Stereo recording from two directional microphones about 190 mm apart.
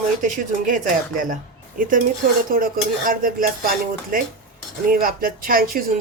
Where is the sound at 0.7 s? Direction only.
45° right (ahead or behind).